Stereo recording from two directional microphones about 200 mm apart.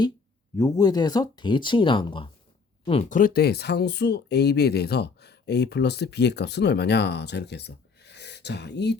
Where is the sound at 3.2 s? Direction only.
50° left (ahead or behind).